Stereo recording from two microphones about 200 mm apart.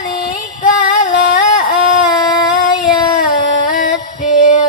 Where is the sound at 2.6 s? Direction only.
40° left (ahead or behind).